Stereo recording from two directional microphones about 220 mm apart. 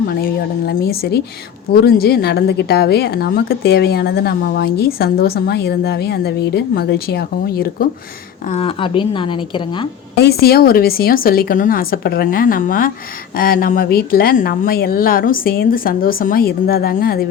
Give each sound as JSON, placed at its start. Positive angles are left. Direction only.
{"t": 0.1, "sound": "a woman's voice", "side_deg": 45}
{"t": 8.4, "sound": "a woman's voice", "side_deg": 25}
{"t": 10.2, "sound": "speech", "side_deg": 45}